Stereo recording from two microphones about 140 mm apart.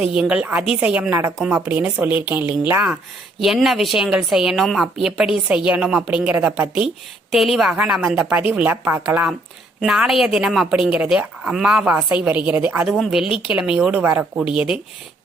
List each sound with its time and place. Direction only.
0.0 s a woman's voice: 5° right (ahead or behind)
2.9 s a woman's voice: centre (ahead or behind)